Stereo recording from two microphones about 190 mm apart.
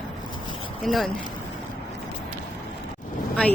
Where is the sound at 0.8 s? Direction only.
Centre (ahead or behind).